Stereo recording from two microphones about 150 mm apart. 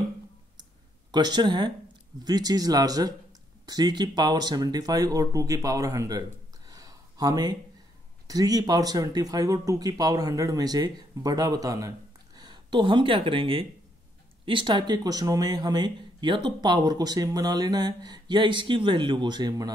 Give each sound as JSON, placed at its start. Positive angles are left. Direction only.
{"t": 1.1, "sound": "speech", "side_deg": -30}
{"t": 6.7, "sound": "a sound", "side_deg": -25}
{"t": 8.3, "sound": "speech", "side_deg": -25}